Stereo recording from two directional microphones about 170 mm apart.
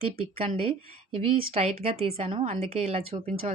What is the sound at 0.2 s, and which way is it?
Speech, 35° right (ahead or behind).